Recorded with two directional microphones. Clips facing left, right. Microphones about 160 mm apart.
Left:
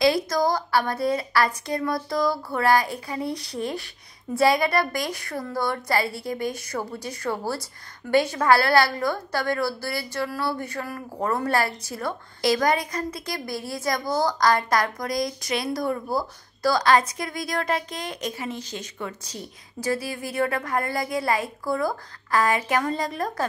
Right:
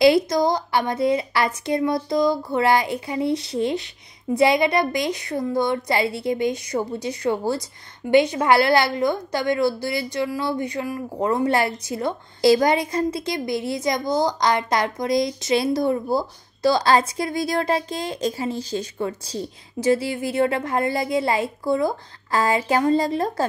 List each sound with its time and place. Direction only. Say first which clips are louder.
0.0 s a woman's voice: right 5 dB; 20° right (ahead or behind)